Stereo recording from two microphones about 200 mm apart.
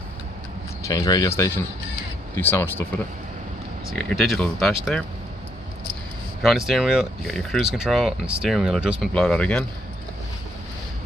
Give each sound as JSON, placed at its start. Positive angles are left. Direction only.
{"t": 0.8, "sound": "speech", "side_deg": 20}
{"t": 3.9, "sound": "speech", "side_deg": 0}
{"t": 6.4, "sound": "speech", "side_deg": 0}